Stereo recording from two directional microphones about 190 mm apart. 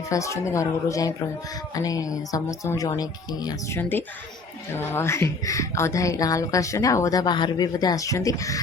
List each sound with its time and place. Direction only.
0.1 s a woman's voice: 15° left (ahead or behind)